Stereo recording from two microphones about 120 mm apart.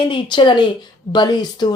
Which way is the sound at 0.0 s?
45° left (ahead or behind).